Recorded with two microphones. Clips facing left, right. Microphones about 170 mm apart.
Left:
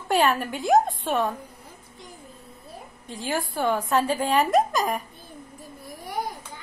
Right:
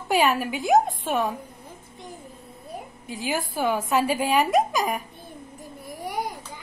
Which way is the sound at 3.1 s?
Centre (ahead or behind).